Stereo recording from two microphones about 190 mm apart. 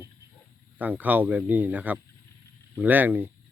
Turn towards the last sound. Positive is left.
turn(degrees=-10)  # may be behind; listen again after turning